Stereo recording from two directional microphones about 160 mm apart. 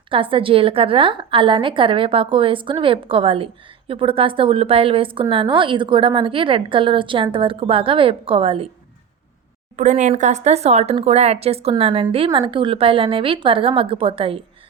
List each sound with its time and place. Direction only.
0.1 s a woman's voice: 35° right (ahead or behind)
9.7 s a woman's voice: 45° right (ahead or behind)